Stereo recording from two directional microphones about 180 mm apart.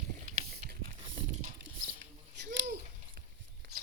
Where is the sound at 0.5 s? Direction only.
55° right (ahead or behind).